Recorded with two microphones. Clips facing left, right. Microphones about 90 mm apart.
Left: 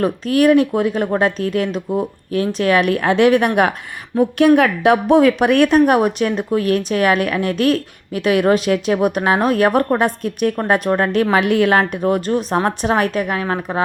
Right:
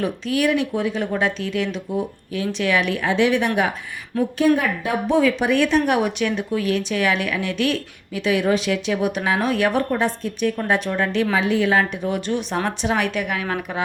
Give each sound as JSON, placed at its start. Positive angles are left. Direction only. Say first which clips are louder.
{"t": 0.0, "sound": "a woman's voice", "louder": "left 6 dB", "side_deg": 45}
{"t": 4.2, "sound": "a woman's voice", "louder": "left 6 dB", "side_deg": 70}